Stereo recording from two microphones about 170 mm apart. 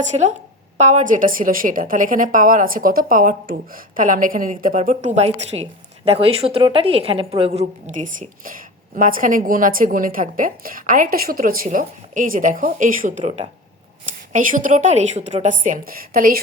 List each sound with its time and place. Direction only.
0.0 s a woman's voice: 45° right (ahead or behind)
14.1 s a woman's voice: 50° right (ahead or behind)